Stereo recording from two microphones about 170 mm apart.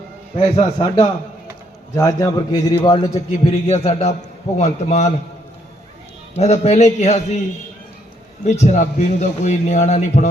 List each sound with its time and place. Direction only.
0.3 s a man's voice: 30° left (ahead or behind)
6.3 s a man's voice: 40° left (ahead or behind)
8.4 s a man's voice: 45° left (ahead or behind)